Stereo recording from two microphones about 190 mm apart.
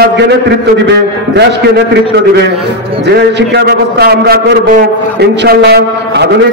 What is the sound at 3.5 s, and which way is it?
Speech, 60° right (ahead or behind).